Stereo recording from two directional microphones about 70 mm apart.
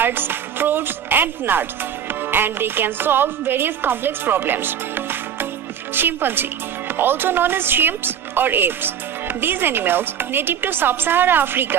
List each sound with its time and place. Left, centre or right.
0.0 s music: right
2.0 s a woman's voice: right